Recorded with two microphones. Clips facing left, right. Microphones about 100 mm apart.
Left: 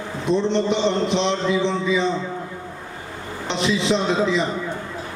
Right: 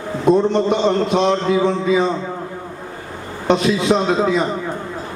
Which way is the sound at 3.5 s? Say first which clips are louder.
Right 6 dB; 45° right (ahead or behind).